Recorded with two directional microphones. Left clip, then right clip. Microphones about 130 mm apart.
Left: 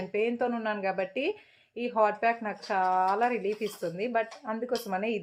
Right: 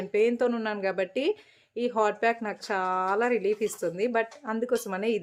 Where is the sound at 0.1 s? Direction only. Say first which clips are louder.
Right 5 dB; 35° right (ahead or behind).